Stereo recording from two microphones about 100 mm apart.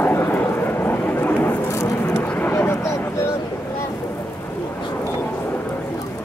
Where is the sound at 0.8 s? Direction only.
20° left (ahead or behind).